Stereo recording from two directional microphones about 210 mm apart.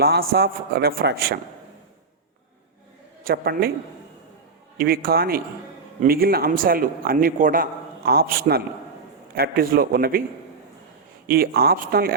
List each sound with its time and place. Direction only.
0.0 s a man's voice: 45° right (ahead or behind)
3.2 s a man's voice: 45° right (ahead or behind)
4.8 s a man's voice: 45° right (ahead or behind)
11.3 s a man's voice: 45° right (ahead or behind)